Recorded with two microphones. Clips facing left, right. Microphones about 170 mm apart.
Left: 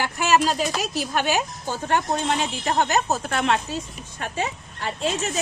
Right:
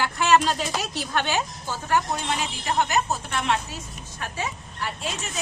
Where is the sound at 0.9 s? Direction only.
10° left (ahead or behind).